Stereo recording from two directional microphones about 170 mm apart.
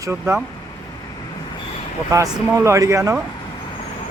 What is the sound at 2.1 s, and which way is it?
Speech, 20° right (ahead or behind).